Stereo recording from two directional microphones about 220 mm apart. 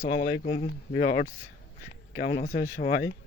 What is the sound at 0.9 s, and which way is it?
Speech, 50° left (ahead or behind).